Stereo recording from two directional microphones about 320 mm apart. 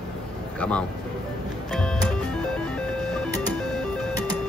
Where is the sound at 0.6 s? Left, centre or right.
Centre.